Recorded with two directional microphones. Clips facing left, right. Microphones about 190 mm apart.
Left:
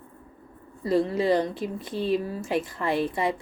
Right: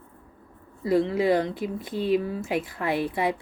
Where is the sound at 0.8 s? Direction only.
15° right (ahead or behind).